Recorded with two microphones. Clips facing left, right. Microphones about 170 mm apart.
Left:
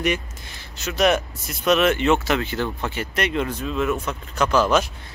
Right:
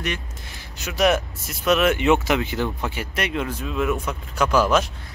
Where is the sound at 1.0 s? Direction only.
5° right (ahead or behind).